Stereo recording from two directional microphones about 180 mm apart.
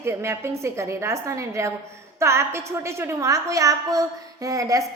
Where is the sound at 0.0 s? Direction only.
15° right (ahead or behind).